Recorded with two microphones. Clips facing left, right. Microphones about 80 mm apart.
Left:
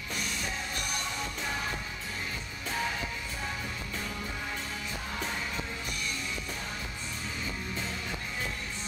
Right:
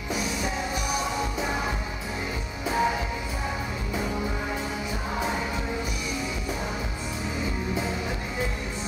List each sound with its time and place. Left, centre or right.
0.1 s music: centre
2.7 s music: centre